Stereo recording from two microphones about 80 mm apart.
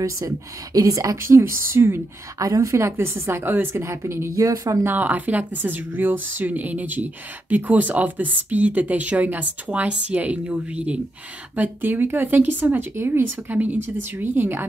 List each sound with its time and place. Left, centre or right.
0.7 s a woman's voice: right
2.3 s a woman's voice: right
4.8 s speech: right